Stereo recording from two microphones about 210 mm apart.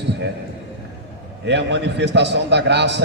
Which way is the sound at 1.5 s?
55° right (ahead or behind).